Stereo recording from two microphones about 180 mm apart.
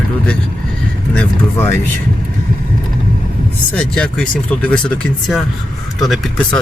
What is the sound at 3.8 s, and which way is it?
Speech, 5° left (ahead or behind).